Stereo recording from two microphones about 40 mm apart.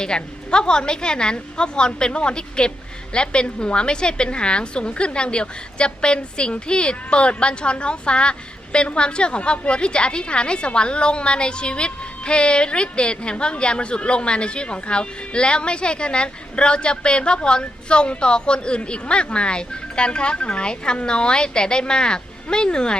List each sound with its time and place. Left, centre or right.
0.0 s a woman's voice: left